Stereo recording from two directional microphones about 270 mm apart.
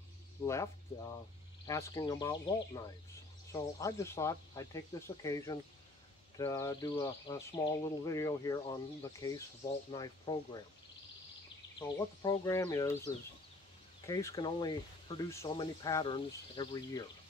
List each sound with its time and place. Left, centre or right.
0.5 s speech: centre
12.2 s speech: centre